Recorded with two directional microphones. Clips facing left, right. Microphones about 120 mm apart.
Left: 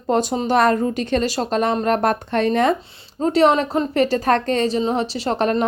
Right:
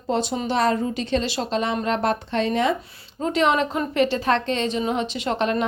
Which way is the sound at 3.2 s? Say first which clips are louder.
Left 5 dB; 35° left (ahead or behind).